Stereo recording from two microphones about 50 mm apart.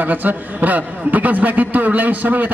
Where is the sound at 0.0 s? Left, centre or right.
Right.